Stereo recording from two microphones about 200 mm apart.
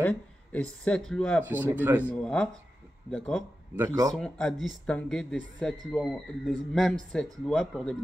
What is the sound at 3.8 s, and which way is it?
Speech, 15° right (ahead or behind).